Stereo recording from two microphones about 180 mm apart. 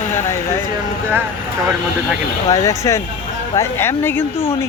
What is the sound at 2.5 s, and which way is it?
Speech, 20° left (ahead or behind).